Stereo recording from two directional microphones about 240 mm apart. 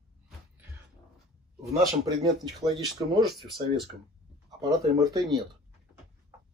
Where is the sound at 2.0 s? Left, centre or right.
Centre.